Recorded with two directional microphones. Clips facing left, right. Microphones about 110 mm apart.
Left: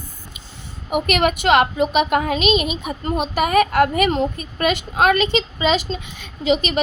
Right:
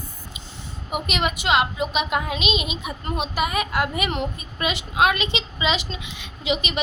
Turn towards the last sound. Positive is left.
turn(degrees=45)  # may be behind; listen again after turning